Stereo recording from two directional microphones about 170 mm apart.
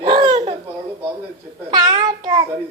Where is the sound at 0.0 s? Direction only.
30° right (ahead or behind).